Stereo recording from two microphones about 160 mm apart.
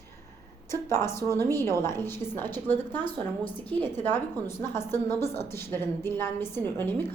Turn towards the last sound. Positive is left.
turn(degrees=15)  # may be behind; listen again after turning